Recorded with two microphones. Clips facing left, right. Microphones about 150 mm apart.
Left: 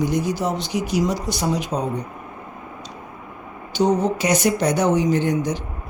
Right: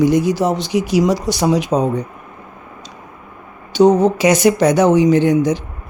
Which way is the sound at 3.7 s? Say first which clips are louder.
Right 8 dB; 90° right.